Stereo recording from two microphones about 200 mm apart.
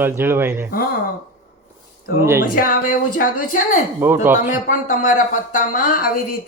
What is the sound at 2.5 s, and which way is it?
A woman's voice, 45° left (ahead or behind).